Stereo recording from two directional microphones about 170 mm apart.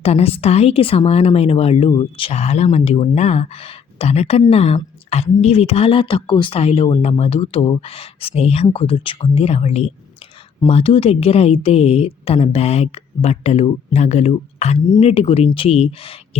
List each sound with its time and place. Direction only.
0.0 s speech: 35° left (ahead or behind)